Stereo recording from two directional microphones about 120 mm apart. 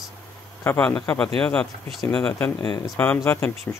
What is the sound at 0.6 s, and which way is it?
Speech, 15° left (ahead or behind).